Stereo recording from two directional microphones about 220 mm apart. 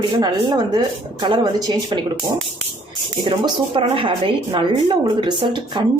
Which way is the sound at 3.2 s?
20° right (ahead or behind).